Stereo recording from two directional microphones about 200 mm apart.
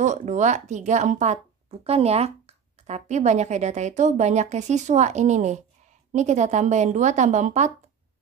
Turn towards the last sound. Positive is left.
turn(degrees=-35)  # may be behind; listen again after turning